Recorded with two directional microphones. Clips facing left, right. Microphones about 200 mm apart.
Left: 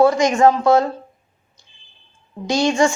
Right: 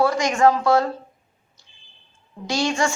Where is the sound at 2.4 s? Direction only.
20° left (ahead or behind).